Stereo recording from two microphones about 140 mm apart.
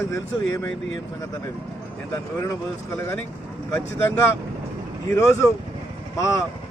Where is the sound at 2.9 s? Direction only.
15° left (ahead or behind).